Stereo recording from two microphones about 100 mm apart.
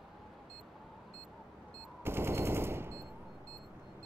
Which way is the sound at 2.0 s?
25° right (ahead or behind).